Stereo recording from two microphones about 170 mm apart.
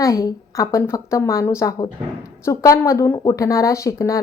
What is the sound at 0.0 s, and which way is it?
A woman's voice, 20° left (ahead or behind).